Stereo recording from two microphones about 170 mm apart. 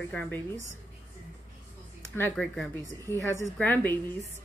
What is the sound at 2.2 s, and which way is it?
Speech, 10° left (ahead or behind).